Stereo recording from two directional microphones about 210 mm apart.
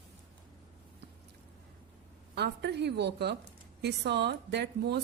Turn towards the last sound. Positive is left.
turn(degrees=-50)  # may be behind; listen again after turning